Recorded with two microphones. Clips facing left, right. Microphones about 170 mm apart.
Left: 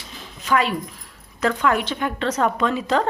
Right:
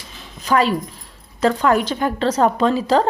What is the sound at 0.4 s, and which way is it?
A woman's voice, 35° right (ahead or behind).